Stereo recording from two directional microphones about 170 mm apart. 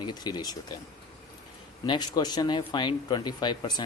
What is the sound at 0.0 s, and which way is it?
Speech, 25° left (ahead or behind).